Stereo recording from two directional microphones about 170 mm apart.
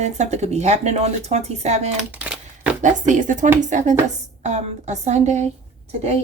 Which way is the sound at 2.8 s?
50° right (ahead or behind).